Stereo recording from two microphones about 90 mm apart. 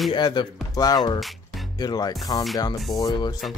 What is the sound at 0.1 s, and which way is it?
Speech, 60° left (ahead or behind).